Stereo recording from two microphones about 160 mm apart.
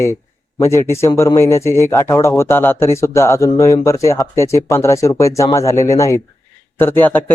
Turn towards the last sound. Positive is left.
turn(degrees=10)  # may be behind; listen again after turning